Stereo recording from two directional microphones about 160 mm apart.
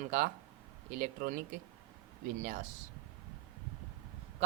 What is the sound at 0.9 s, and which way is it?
A man's voice, 60° right (ahead or behind).